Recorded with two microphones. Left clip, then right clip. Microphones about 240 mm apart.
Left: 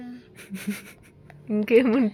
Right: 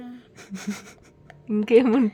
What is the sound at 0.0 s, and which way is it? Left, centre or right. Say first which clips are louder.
Gasp: even; right.